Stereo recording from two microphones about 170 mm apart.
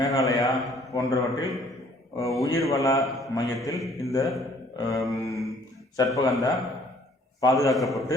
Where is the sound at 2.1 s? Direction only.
20° left (ahead or behind).